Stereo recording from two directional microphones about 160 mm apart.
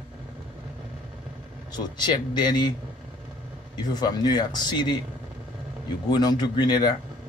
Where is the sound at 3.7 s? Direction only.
25° left (ahead or behind).